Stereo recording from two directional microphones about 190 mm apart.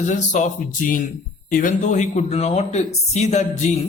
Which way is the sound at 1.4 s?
45° left (ahead or behind).